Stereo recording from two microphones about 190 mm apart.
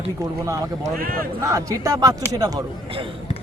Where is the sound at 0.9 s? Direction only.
50° right (ahead or behind).